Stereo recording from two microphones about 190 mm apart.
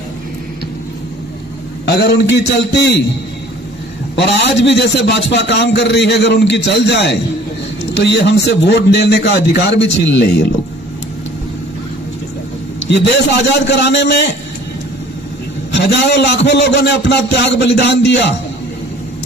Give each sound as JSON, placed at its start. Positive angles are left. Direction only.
{"t": 1.9, "sound": "a man's voice", "side_deg": 65}
{"t": 4.1, "sound": "a man's voice", "side_deg": 65}
{"t": 13.5, "sound": "a man's voice", "side_deg": 65}
{"t": 15.7, "sound": "a man's voice", "side_deg": 65}